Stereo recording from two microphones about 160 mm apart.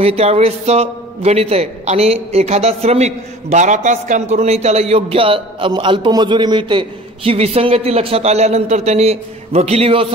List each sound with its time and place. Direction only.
0.0 s a man's voice: 40° right (ahead or behind)